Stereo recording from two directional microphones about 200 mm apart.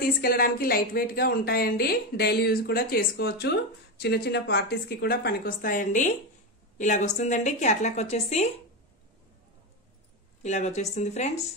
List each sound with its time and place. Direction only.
0.2 s a woman's voice: 50° left (ahead or behind)
10.4 s a woman's voice: 35° left (ahead or behind)